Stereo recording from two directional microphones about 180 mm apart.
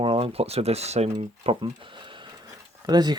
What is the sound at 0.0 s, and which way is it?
Speech, 30° right (ahead or behind).